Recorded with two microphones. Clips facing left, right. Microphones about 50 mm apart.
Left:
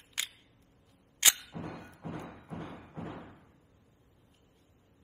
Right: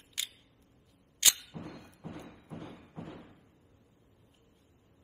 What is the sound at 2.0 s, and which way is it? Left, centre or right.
Thump, left.